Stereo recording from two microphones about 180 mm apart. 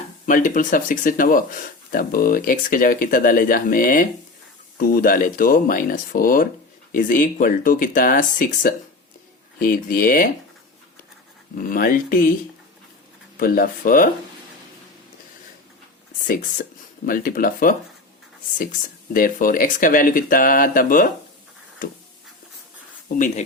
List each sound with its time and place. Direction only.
0.3 s speech: 50° left (ahead or behind)
11.5 s speech: 50° left (ahead or behind)
13.3 s speech: 50° left (ahead or behind)
17.1 s speech: 50° left (ahead or behind)
19.1 s speech: 50° left (ahead or behind)
23.1 s speech: 45° left (ahead or behind)